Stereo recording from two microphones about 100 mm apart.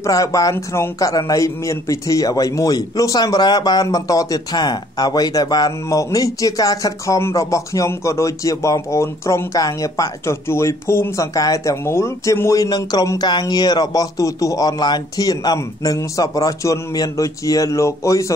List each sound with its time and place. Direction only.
0.0 s a man's voice: 35° left (ahead or behind)